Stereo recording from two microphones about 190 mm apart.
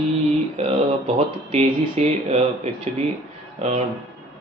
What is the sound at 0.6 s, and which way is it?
Speech, 35° right (ahead or behind).